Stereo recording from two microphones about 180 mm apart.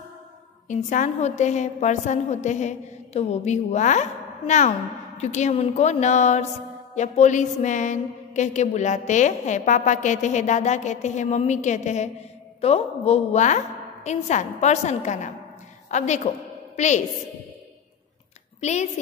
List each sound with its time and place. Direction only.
0.7 s a woman's voice: 45° left (ahead or behind)
18.6 s a woman's voice: 40° left (ahead or behind)